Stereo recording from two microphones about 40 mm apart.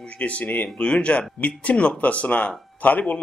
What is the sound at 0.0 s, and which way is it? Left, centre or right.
A man's voice, left.